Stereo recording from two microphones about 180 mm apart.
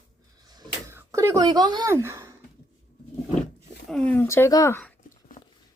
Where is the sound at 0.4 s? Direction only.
20° right (ahead or behind).